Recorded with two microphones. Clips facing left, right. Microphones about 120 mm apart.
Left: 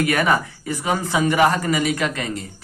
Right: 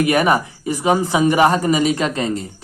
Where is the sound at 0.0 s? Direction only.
20° right (ahead or behind).